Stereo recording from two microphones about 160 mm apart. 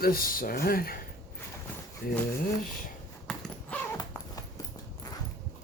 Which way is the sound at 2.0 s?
70° left (ahead or behind).